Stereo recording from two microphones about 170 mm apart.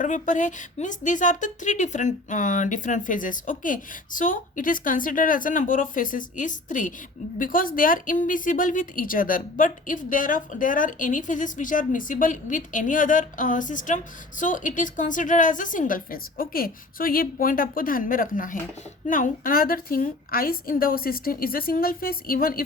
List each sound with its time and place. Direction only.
0.0 s a woman's voice: 45° left (ahead or behind)